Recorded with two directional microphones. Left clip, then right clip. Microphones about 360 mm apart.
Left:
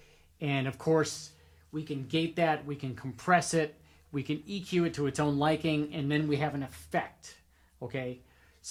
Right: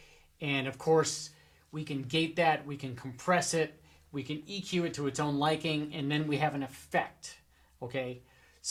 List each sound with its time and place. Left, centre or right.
0.3 s speech: left